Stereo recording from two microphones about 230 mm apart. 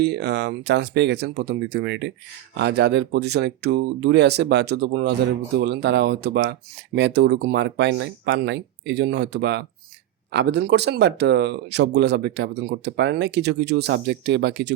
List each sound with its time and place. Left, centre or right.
0.0 s speech: right